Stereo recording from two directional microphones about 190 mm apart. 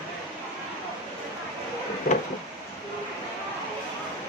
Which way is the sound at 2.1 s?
50° left (ahead or behind).